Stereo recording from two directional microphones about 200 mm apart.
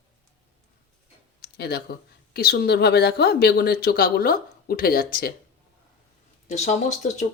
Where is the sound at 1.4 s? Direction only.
50° left (ahead or behind).